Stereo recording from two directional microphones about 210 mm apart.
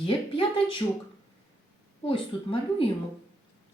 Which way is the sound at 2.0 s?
25° left (ahead or behind).